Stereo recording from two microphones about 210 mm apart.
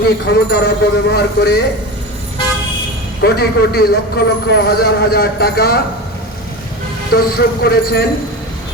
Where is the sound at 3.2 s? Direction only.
50° left (ahead or behind).